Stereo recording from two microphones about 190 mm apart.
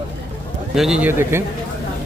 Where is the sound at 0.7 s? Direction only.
5° right (ahead or behind).